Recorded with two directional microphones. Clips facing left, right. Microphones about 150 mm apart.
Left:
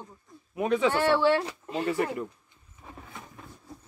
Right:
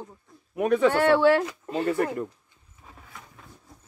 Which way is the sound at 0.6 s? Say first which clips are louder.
Right 4 dB; 60° right (ahead or behind).